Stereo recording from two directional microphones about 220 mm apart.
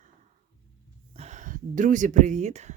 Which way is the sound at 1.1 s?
30° right (ahead or behind).